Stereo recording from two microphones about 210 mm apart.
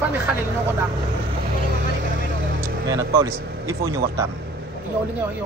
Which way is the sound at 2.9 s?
15° right (ahead or behind).